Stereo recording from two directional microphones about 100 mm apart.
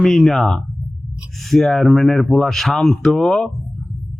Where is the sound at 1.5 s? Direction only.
Centre (ahead or behind).